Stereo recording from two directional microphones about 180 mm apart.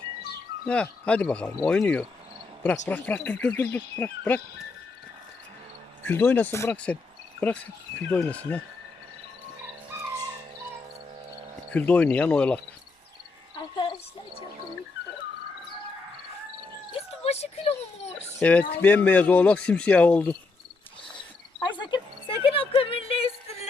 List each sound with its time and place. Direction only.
0.7 s speech: 5° left (ahead or behind)
6.0 s speech: 10° left (ahead or behind)
8.1 s speech: 10° left (ahead or behind)
11.7 s speech: 10° left (ahead or behind)
16.9 s a sound: 35° left (ahead or behind)
18.3 s speech: 10° left (ahead or behind)
21.8 s a sound: 25° left (ahead or behind)